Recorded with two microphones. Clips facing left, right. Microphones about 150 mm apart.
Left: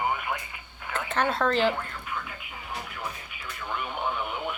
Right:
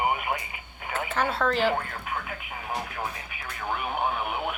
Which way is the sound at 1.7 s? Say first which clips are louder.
Right 4 dB; 60° right (ahead or behind).